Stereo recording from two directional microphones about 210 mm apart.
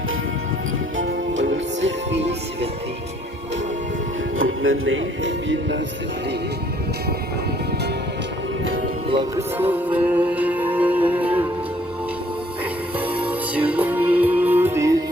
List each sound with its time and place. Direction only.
0.9 s music: 60° right (ahead or behind)
4.4 s music: 70° right (ahead or behind)
9.0 s music: 25° right (ahead or behind)
9.6 s music: 10° right (ahead or behind)
13.1 s music: 5° right (ahead or behind)